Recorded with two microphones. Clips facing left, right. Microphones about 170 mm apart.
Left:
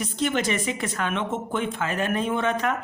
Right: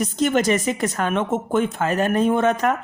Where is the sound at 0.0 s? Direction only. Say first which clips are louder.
Right 6 dB; 45° right (ahead or behind).